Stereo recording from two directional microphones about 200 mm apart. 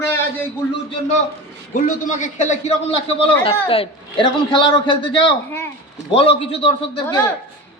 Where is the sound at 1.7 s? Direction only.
40° left (ahead or behind).